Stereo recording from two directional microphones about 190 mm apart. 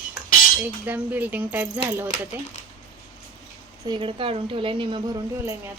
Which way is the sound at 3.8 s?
25° right (ahead or behind).